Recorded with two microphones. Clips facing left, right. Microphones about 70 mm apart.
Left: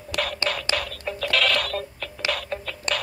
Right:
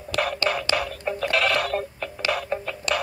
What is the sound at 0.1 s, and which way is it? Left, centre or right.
Music, left.